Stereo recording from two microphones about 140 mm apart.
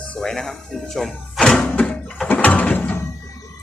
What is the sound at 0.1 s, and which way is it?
Music, 5° left (ahead or behind).